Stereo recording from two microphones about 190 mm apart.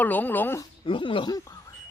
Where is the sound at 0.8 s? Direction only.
25° left (ahead or behind).